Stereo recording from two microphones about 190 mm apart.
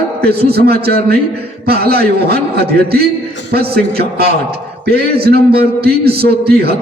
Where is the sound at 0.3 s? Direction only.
55° right (ahead or behind).